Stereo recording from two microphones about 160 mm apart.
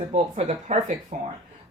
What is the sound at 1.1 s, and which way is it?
Speech, 50° right (ahead or behind).